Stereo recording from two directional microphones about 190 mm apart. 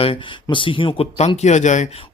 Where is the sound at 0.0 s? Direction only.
25° left (ahead or behind).